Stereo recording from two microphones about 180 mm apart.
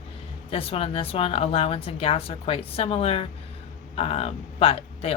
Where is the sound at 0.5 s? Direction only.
30° left (ahead or behind).